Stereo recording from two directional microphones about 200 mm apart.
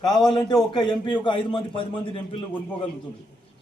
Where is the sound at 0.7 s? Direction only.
20° left (ahead or behind).